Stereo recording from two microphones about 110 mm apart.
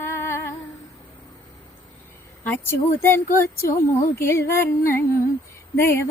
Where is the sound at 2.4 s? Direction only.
20° left (ahead or behind).